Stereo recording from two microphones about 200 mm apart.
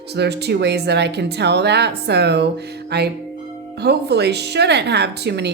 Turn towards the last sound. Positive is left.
turn(degrees=-55)  # may be behind; listen again after turning